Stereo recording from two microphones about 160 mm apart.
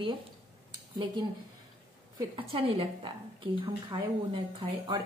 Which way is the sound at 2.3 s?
35° right (ahead or behind).